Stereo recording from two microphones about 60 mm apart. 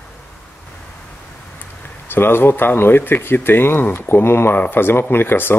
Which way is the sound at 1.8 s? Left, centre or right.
Left.